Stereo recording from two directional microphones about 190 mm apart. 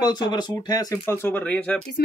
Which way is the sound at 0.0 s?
20° left (ahead or behind).